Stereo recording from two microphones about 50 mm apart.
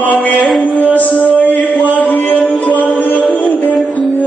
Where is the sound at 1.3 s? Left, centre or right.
Left.